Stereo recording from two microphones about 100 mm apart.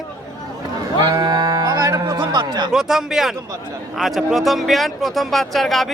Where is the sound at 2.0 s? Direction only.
45° right (ahead or behind).